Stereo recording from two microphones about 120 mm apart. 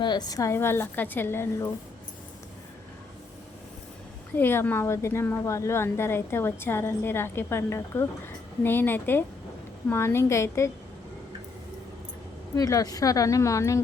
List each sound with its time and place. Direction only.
0.0 s a woman's voice: 35° left (ahead or behind); by 1.7 s 20° left (ahead or behind)
4.4 s a woman's voice: 20° left (ahead or behind)
12.5 s a woman's voice: 30° left (ahead or behind)